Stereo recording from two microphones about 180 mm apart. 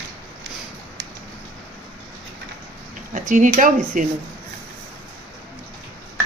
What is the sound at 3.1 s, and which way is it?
Speech, 45° right (ahead or behind).